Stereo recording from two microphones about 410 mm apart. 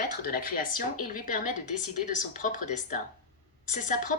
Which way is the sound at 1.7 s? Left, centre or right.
Left.